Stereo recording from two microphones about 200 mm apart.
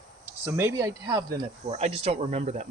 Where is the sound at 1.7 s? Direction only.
35° right (ahead or behind).